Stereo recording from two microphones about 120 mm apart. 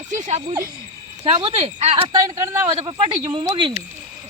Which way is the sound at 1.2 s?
55° right (ahead or behind).